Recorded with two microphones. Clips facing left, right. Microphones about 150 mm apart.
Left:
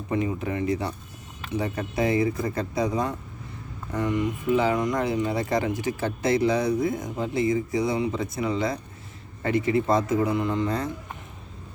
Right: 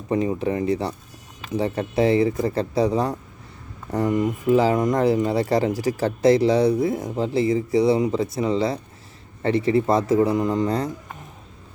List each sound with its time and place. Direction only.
0.1 s speech: 30° right (ahead or behind)
3.9 s speech: 45° right (ahead or behind)